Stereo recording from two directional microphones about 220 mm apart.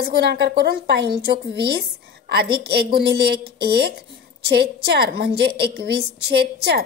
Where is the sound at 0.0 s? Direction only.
50° right (ahead or behind).